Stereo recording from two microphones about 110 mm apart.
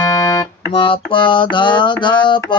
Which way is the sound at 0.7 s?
50° left (ahead or behind).